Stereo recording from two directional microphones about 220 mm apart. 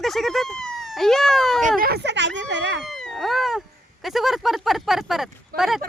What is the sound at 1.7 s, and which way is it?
Speech, 45° right (ahead or behind).